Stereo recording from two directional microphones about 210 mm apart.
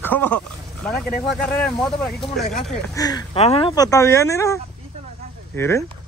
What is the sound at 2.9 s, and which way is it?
Speech, 15° left (ahead or behind).